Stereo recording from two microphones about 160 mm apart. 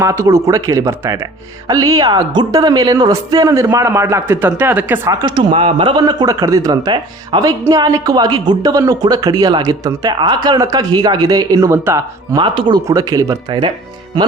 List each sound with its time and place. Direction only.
0.0 s speech: 20° right (ahead or behind)
5.2 s speech: 30° right (ahead or behind)
12.4 s speech: 30° right (ahead or behind)